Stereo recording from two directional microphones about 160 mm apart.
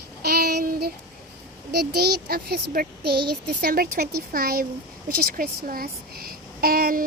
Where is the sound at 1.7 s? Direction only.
85° right.